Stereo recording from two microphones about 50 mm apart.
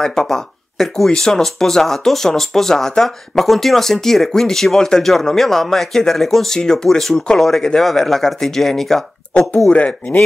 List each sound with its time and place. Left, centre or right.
0.0 s speech: centre
9.7 s speech: left